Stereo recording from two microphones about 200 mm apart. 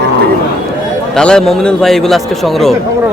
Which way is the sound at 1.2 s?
5° left (ahead or behind).